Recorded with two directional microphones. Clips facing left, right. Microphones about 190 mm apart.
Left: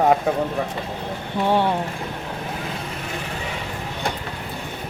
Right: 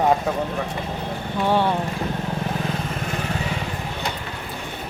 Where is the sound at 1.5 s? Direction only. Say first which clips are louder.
Even; 15° left (ahead or behind).